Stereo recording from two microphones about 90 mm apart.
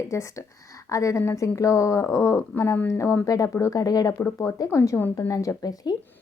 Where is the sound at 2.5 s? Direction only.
25° left (ahead or behind).